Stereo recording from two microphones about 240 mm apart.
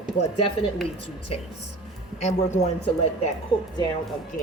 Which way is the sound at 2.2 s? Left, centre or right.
Left.